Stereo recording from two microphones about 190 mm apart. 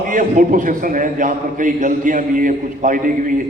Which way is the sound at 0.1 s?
45° right (ahead or behind).